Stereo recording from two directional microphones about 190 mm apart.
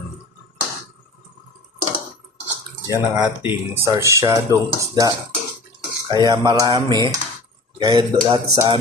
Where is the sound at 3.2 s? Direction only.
10° right (ahead or behind).